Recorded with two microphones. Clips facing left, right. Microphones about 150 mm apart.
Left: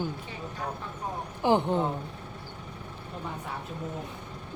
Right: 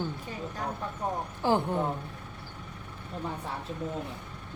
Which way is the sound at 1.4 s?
20° left (ahead or behind).